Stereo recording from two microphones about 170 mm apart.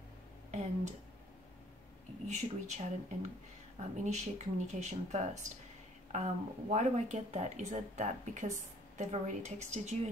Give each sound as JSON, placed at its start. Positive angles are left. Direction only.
{"t": 0.5, "sound": "speech", "side_deg": -40}
{"t": 2.2, "sound": "speech", "side_deg": -45}